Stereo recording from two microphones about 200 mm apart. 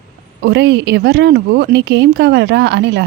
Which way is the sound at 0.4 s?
60° right (ahead or behind).